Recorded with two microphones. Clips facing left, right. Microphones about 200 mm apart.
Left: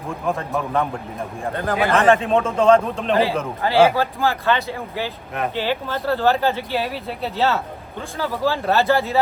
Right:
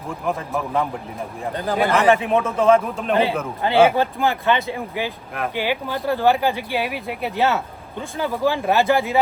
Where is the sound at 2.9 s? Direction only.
Centre (ahead or behind).